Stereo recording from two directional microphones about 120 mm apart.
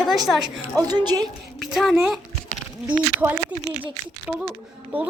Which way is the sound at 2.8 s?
15° right (ahead or behind).